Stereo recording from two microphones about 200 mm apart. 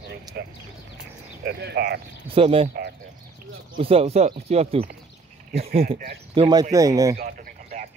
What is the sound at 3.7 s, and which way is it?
Speech, 30° right (ahead or behind).